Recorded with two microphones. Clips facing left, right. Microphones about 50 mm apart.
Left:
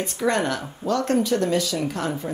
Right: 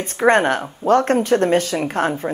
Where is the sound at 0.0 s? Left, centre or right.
Right.